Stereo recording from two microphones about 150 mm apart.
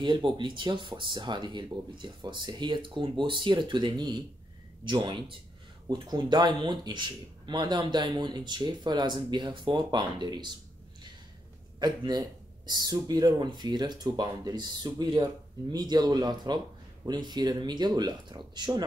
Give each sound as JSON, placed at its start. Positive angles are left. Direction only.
{"t": 0.0, "sound": "speech", "side_deg": -30}
{"t": 11.8, "sound": "speech", "side_deg": -30}